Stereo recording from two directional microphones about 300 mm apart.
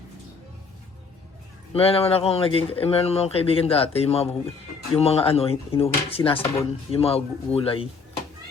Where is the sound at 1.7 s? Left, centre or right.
Centre.